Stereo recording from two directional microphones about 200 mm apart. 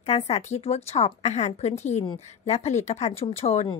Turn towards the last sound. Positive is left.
turn(degrees=30)  # may be behind; listen again after turning